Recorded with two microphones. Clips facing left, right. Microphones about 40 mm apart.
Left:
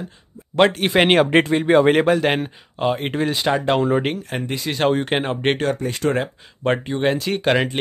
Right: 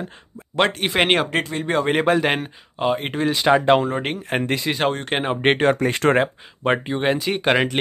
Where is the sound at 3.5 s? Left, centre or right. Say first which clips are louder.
Right 5 dB; centre.